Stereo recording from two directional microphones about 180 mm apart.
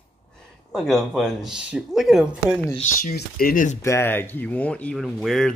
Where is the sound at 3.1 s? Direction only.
55° left (ahead or behind).